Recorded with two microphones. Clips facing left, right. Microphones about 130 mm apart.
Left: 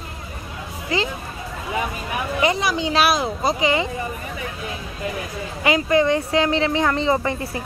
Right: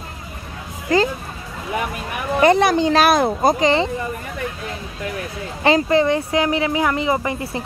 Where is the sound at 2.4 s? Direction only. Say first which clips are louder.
Right 8 dB; 55° right (ahead or behind).